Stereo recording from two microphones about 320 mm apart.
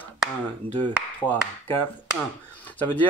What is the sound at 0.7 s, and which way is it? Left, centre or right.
Speech, centre.